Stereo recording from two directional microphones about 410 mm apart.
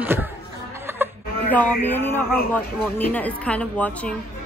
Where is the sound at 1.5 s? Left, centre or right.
Centre.